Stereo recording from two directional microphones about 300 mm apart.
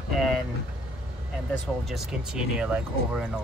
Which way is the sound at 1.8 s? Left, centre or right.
Centre.